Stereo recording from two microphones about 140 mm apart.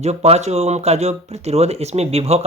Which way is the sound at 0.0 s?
50° right (ahead or behind).